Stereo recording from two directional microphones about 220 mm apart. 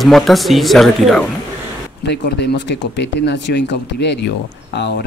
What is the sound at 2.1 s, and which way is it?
Speech, 50° left (ahead or behind).